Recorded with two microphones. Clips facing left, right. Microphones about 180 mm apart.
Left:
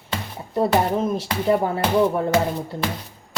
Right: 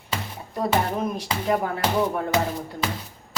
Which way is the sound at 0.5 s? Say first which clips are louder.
Left 4 dB; 25° left (ahead or behind).